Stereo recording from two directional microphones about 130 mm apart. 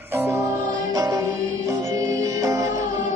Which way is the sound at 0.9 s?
30° right (ahead or behind).